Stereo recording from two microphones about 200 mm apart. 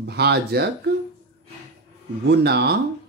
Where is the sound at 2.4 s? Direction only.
55° right (ahead or behind).